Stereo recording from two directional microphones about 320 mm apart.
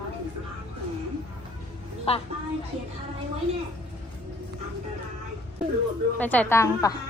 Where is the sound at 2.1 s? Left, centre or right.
Centre.